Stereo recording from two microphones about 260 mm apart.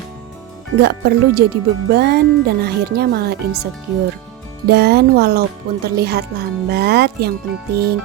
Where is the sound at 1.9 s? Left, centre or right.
Right.